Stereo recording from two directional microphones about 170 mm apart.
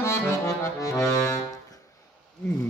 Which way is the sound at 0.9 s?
20° left (ahead or behind).